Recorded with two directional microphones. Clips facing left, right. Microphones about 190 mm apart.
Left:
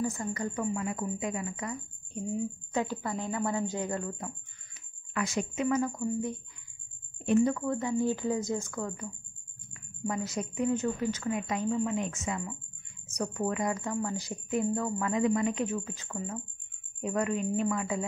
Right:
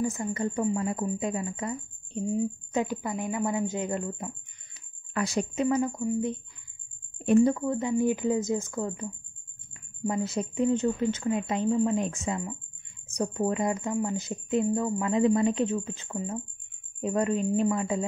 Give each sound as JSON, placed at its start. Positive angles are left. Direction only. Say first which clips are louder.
{"t": 0.1, "sound": "speech", "louder": "right 4 dB", "side_deg": -25}
{"t": 2.7, "sound": "speech", "louder": "even", "side_deg": -15}
{"t": 5.1, "sound": "a woman's voice", "louder": "right 3 dB", "side_deg": -35}
{"t": 5.9, "sound": "speech", "louder": "right 4 dB", "side_deg": -15}
{"t": 7.2, "sound": "a woman's voice", "louder": "right 4 dB", "side_deg": -40}
{"t": 7.5, "sound": "speech", "louder": "right 3 dB", "side_deg": -15}